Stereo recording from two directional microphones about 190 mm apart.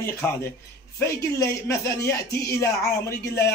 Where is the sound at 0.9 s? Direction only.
15° left (ahead or behind).